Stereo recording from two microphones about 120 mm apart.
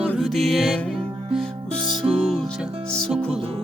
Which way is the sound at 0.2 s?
Centre (ahead or behind).